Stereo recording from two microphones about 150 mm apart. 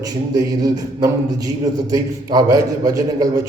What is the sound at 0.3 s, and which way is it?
A man's voice, 25° right (ahead or behind).